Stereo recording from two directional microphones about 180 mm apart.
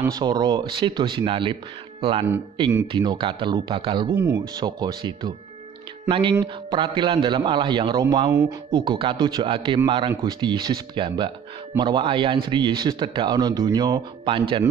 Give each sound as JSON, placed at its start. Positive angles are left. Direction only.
{"t": 0.0, "sound": "speech", "side_deg": -25}